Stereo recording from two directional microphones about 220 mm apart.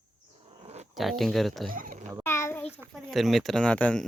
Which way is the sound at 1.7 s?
40° right (ahead or behind).